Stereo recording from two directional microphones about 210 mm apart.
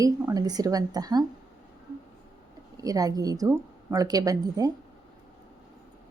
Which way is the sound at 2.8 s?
15° right (ahead or behind).